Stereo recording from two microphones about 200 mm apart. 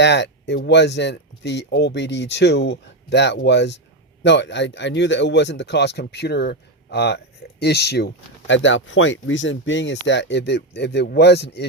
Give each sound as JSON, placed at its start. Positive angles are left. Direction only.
{"t": 0.0, "sound": "speech", "side_deg": 60}